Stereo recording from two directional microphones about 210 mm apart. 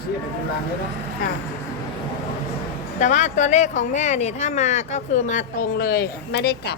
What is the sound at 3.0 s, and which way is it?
Speech, 35° left (ahead or behind).